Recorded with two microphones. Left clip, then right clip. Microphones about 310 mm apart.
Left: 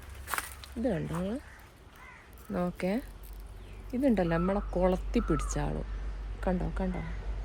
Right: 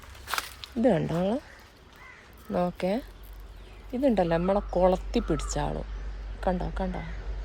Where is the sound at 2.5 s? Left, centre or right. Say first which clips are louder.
Right 5 dB; centre.